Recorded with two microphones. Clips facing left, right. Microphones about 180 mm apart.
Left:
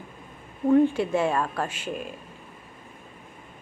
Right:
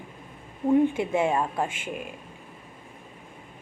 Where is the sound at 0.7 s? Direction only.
20° right (ahead or behind).